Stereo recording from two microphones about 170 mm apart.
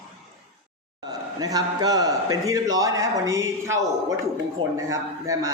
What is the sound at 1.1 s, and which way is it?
Speech, 20° right (ahead or behind).